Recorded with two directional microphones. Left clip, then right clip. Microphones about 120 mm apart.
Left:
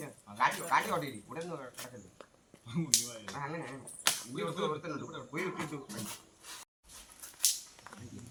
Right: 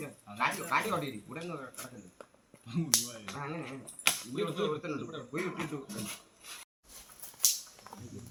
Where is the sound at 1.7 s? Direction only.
5° right (ahead or behind).